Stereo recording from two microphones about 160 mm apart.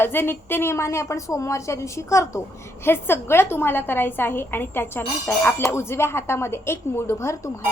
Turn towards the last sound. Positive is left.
turn(degrees=15)  # may be behind; listen again after turning